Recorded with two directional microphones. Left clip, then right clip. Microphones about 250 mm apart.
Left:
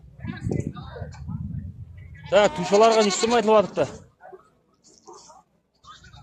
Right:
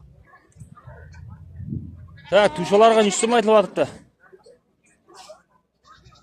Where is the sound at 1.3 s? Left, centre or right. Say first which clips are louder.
Left 11 dB; left.